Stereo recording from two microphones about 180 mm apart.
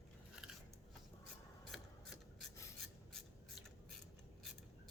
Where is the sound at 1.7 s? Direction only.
Centre (ahead or behind).